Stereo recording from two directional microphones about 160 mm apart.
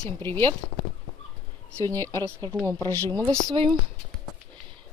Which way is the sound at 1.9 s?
15° left (ahead or behind).